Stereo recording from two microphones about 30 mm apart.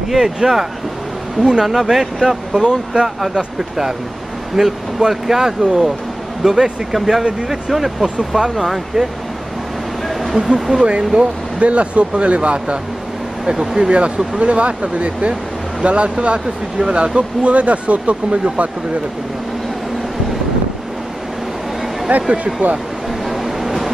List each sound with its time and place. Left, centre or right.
0.1 s speech: centre
1.7 s speech: centre
10.4 s speech: right
10.8 s speech: right
11.1 s speech: right
13.7 s speech: right
22.3 s speech: right
23.3 s vehicle: centre